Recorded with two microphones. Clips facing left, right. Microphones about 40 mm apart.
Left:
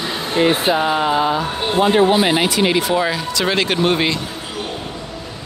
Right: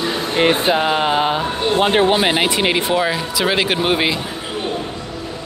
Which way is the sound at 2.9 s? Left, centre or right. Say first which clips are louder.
Even; centre.